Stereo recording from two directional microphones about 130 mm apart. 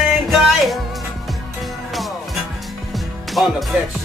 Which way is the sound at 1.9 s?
Centre (ahead or behind).